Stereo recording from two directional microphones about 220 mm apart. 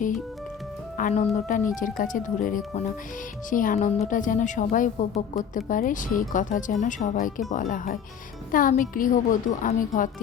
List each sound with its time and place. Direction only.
0.9 s a woman's voice: 35° left (ahead or behind)